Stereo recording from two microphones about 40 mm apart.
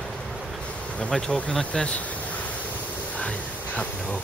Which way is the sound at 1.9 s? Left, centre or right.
Left.